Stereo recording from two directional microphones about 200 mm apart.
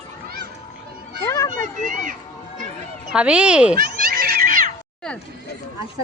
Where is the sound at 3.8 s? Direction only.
50° right (ahead or behind).